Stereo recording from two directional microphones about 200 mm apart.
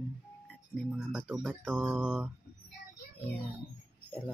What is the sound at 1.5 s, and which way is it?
Speech, centre (ahead or behind).